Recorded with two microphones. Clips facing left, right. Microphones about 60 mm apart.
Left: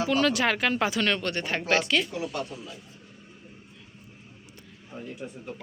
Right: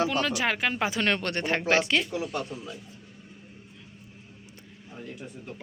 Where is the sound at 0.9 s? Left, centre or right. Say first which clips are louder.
Even; right.